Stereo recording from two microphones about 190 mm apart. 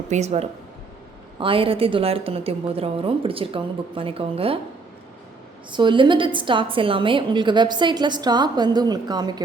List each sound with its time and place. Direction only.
0.1 s a woman's voice: 35° right (ahead or behind)
5.7 s a woman's voice: 25° right (ahead or behind)